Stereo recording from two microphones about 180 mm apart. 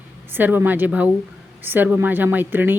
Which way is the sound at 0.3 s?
10° right (ahead or behind).